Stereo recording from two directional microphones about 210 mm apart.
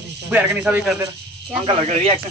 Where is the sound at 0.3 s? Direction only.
5° right (ahead or behind).